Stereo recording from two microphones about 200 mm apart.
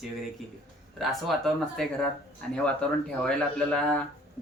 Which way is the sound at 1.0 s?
Centre (ahead or behind).